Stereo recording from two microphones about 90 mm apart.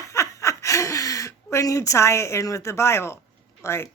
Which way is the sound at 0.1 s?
35° left (ahead or behind).